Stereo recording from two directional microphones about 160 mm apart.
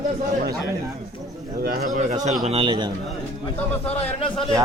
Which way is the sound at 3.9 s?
35° left (ahead or behind).